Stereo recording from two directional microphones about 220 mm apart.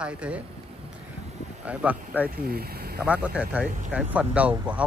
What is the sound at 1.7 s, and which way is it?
Speech, 5° right (ahead or behind).